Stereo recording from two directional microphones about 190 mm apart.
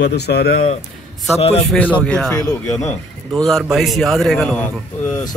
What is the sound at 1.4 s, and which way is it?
Speech, 35° left (ahead or behind).